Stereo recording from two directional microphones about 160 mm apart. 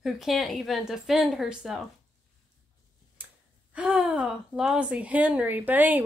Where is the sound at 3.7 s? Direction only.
10° right (ahead or behind).